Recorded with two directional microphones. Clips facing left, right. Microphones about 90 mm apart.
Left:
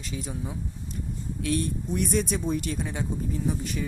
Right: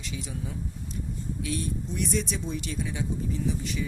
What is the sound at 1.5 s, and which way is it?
Speech, 55° left (ahead or behind).